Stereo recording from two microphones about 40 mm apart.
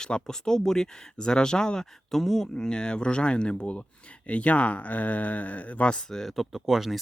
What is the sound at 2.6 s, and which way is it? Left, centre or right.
Speech, centre.